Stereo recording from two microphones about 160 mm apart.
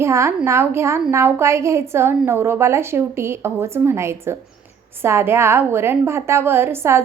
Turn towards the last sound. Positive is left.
turn(degrees=-15)  # may be behind; listen again after turning